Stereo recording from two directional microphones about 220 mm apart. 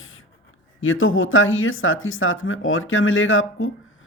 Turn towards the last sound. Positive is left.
turn(degrees=65)  # may be behind; listen again after turning